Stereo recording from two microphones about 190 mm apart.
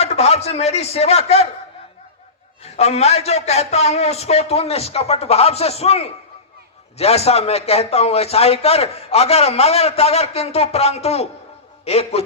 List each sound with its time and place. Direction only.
0.0 s a man's voice: 35° left (ahead or behind)
2.6 s a man's voice: 35° left (ahead or behind)